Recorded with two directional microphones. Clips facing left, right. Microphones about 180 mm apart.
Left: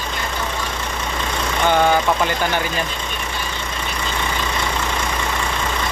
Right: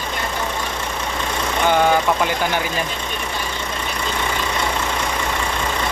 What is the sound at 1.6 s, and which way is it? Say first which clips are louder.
Speech: even; 10° right (ahead or behind).